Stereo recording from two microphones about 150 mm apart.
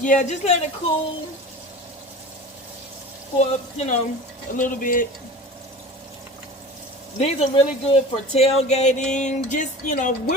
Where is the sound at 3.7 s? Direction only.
50° left (ahead or behind).